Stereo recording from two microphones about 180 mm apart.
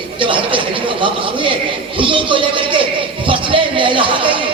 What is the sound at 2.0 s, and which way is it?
A man's voice, 30° right (ahead or behind).